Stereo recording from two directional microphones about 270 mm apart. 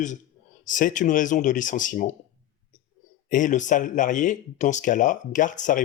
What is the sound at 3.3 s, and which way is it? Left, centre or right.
Speech, left.